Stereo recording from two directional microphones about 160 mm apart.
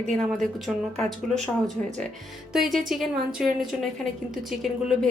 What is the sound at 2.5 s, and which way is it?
Speech, centre (ahead or behind).